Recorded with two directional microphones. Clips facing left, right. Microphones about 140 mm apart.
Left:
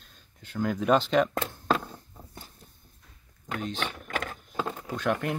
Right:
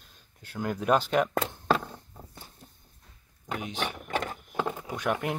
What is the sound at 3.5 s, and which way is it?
Vehicle, 15° right (ahead or behind).